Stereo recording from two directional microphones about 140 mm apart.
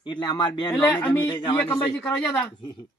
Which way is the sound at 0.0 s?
30° left (ahead or behind).